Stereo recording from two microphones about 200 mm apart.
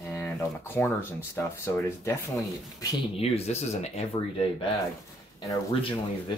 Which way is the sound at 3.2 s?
35° left (ahead or behind).